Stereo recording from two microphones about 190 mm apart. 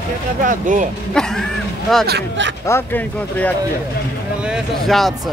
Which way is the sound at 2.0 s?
65° right (ahead or behind).